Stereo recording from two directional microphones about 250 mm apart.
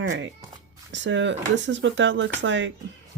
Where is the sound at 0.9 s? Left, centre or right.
Right.